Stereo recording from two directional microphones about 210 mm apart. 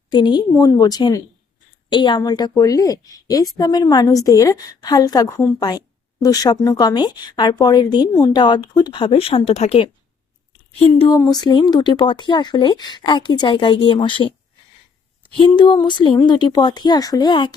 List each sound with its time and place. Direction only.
0.1 s a woman's voice: 20° left (ahead or behind)
15.4 s speech: 20° left (ahead or behind)